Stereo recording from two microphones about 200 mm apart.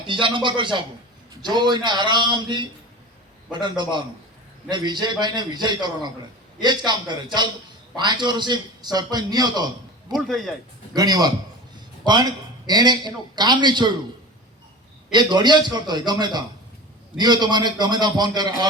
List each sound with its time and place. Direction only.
0.1 s a man's voice: 25° right (ahead or behind)
10.2 s speech: centre (ahead or behind)
10.9 s a man's voice: 20° right (ahead or behind)
15.1 s a man's voice: 20° right (ahead or behind)